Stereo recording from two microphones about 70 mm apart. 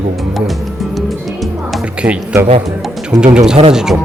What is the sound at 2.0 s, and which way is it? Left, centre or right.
Speech, right.